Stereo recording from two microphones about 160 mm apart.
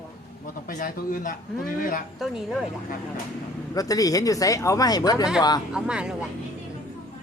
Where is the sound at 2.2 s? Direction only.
Centre (ahead or behind).